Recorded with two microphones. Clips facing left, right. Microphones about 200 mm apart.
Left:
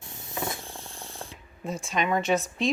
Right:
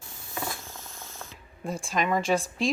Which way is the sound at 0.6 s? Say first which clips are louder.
Left 3 dB; 30° left (ahead or behind).